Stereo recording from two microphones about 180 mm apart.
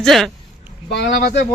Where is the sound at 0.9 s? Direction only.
65° left (ahead or behind).